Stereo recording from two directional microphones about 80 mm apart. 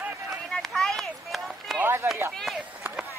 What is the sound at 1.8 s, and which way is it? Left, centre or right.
Speech, right.